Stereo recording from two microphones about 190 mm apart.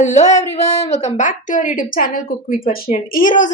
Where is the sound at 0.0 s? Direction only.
35° left (ahead or behind).